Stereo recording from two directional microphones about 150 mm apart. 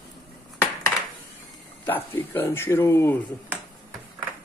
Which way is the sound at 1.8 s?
15° left (ahead or behind).